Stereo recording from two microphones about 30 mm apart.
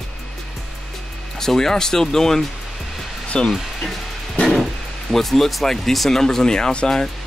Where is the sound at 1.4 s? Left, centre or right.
Centre.